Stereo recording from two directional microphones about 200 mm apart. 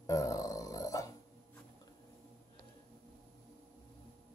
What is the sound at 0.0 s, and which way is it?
Grunt, 15° left (ahead or behind).